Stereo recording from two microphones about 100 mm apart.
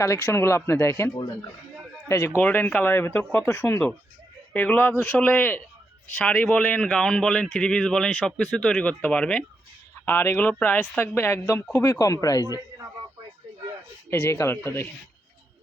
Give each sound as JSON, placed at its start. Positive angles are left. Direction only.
{"t": 0.0, "sound": "a man's voice", "side_deg": 30}
{"t": 10.1, "sound": "speech", "side_deg": 20}
{"t": 14.1, "sound": "speech", "side_deg": 25}